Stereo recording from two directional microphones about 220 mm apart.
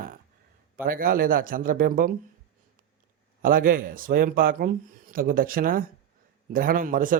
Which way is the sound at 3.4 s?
40° right (ahead or behind).